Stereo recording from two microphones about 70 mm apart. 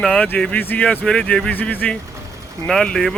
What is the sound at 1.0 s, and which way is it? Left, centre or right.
Speech, centre.